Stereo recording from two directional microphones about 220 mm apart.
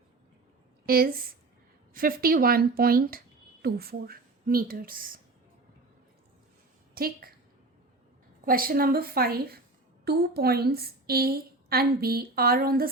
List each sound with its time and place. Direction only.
0.9 s a woman's voice: 40° right (ahead or behind)
6.9 s a woman's voice: 40° right (ahead or behind)
8.4 s a woman's voice: 40° right (ahead or behind)